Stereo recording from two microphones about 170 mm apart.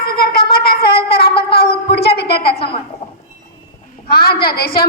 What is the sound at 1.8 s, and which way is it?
Speech, 70° left (ahead or behind).